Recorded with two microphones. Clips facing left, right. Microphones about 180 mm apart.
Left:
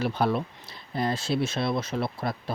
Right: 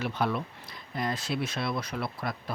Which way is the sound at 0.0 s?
35° left (ahead or behind).